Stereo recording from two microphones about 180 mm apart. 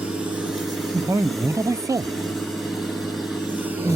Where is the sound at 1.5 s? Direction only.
15° right (ahead or behind).